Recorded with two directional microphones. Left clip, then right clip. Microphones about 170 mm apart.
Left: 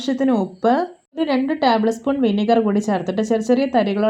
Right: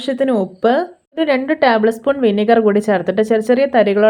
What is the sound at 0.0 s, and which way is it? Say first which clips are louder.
A woman's voice: right 4 dB; 25° right (ahead or behind).